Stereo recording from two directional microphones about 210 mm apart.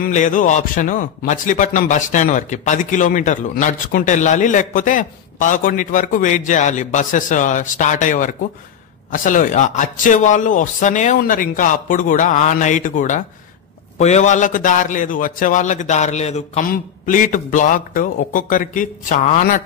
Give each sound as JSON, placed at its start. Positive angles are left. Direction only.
{"t": 0.0, "sound": "a man's voice", "side_deg": 35}